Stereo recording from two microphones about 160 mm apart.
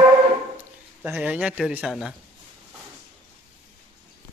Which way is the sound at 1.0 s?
10° right (ahead or behind).